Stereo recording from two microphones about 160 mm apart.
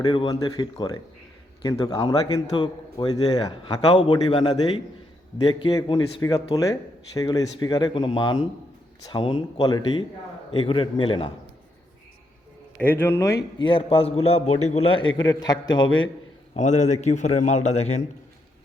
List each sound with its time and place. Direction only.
0.0 s a man's voice: 25° left (ahead or behind)
12.7 s speech: 10° left (ahead or behind)
13.6 s a man's voice: 35° left (ahead or behind)
16.6 s a man's voice: 45° left (ahead or behind)